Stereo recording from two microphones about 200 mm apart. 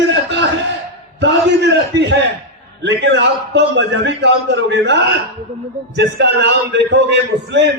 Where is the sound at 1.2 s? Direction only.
60° right (ahead or behind).